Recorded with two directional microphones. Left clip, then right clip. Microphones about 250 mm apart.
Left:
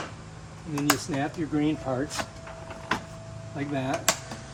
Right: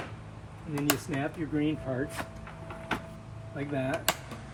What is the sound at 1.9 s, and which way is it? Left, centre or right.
Speech, centre.